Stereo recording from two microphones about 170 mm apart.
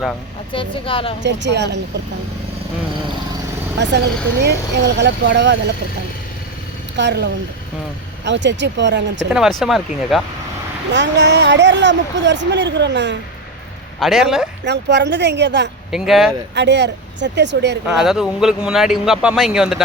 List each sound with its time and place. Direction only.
0.5 s speech: 30° left (ahead or behind)
1.2 s a woman's voice: 90° right
3.8 s a woman's voice: 90° right
6.9 s a woman's voice: 90° right
9.3 s speech: centre (ahead or behind)
10.9 s a woman's voice: 90° right
14.0 s speech: centre (ahead or behind)
14.6 s a woman's voice: 90° right
15.9 s speech: centre (ahead or behind)
16.6 s a woman's voice: 90° right
17.8 s speech: centre (ahead or behind)